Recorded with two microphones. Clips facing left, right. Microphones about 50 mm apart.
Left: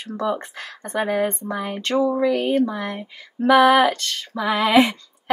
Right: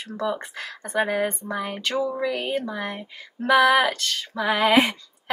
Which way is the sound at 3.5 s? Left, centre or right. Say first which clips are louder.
Left 3 dB; centre.